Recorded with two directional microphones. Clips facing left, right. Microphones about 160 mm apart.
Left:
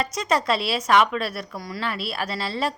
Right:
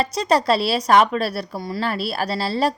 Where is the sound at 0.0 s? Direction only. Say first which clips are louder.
Right 4 dB; 35° right (ahead or behind).